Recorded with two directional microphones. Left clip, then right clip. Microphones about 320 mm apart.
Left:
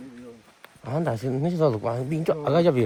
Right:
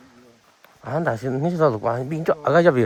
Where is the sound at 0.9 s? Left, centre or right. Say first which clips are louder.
Right 4 dB; right.